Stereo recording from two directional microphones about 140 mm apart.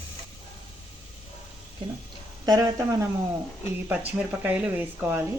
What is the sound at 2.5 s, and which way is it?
Speech, 25° right (ahead or behind).